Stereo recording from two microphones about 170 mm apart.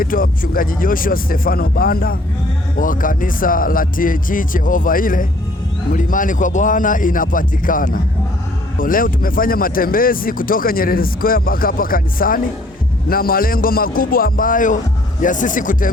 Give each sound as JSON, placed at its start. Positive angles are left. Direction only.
{"t": 0.0, "sound": "speech", "side_deg": 55}